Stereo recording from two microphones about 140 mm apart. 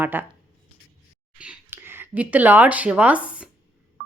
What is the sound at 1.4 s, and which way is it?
Speech, 10° right (ahead or behind).